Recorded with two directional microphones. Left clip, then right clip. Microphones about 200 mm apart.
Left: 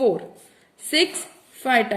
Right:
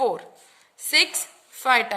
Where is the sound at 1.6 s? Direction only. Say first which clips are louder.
Even; 65° right (ahead or behind).